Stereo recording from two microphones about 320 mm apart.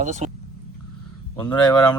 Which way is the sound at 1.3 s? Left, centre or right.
Centre.